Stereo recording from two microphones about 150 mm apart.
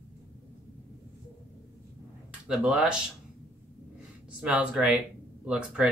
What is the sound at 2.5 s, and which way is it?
Speech, 5° right (ahead or behind).